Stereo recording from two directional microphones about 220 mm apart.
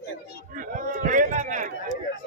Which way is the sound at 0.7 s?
40° right (ahead or behind).